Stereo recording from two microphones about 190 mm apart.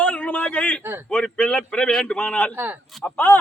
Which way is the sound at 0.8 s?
10° right (ahead or behind).